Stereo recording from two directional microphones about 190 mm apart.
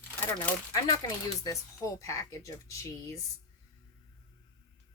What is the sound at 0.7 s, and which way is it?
Speech, 20° left (ahead or behind).